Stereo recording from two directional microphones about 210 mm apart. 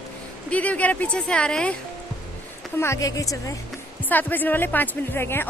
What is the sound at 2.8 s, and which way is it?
Speech, 15° left (ahead or behind).